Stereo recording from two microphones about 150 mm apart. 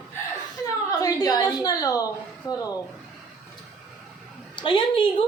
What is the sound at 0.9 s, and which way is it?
A woman's voice, 25° left (ahead or behind).